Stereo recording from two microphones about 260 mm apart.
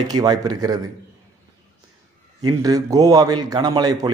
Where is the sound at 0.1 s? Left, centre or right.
Centre.